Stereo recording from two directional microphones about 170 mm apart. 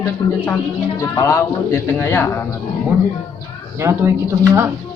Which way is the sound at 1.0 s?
20° left (ahead or behind).